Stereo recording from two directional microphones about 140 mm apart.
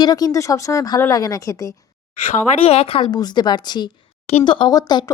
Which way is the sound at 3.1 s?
30° left (ahead or behind).